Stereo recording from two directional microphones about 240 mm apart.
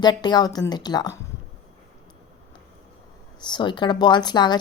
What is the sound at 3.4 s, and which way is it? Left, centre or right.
A woman's voice, centre.